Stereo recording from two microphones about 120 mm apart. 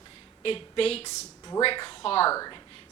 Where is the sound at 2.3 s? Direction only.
30° left (ahead or behind).